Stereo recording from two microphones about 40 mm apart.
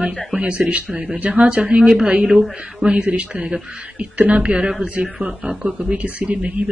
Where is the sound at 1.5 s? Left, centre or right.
Centre.